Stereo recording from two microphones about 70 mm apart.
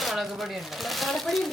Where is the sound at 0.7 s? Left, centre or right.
Centre.